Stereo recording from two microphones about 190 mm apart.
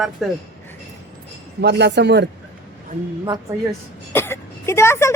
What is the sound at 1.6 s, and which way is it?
Speech, 65° right (ahead or behind).